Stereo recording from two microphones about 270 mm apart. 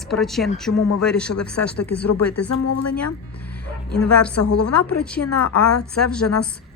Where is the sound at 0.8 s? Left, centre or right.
Left.